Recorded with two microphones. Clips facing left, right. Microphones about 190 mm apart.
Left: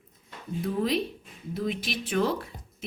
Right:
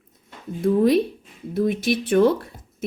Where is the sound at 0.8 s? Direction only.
55° right (ahead or behind).